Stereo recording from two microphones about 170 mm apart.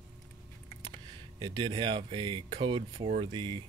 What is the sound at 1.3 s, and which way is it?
Speech, 25° right (ahead or behind).